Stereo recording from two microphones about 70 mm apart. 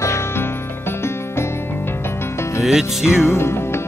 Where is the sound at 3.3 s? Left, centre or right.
Left.